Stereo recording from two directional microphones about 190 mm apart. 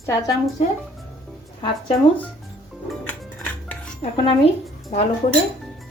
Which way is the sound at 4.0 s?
30° left (ahead or behind).